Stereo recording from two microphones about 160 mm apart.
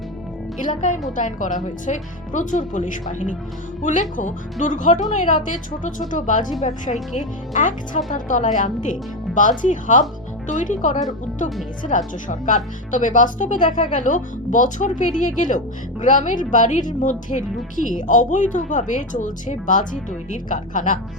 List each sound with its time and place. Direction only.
0.6 s speech: 55° left (ahead or behind)
4.6 s speech: 55° left (ahead or behind)